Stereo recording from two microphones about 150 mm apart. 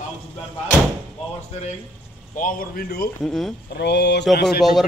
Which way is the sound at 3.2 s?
Centre (ahead or behind).